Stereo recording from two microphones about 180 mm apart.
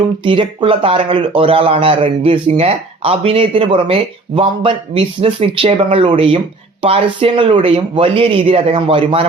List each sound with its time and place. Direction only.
0.3 s speech: 30° right (ahead or behind)